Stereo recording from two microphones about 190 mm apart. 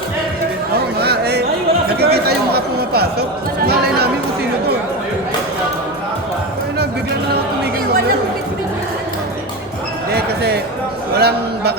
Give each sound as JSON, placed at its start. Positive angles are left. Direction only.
{"t": 0.7, "sound": "chatter", "side_deg": -60}
{"t": 10.1, "sound": "basketball bounce", "side_deg": -55}
{"t": 11.2, "sound": "a man's voice", "side_deg": -60}